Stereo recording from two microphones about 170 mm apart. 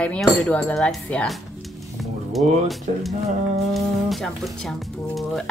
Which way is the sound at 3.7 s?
Centre (ahead or behind).